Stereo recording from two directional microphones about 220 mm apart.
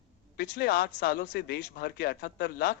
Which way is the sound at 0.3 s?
45° left (ahead or behind).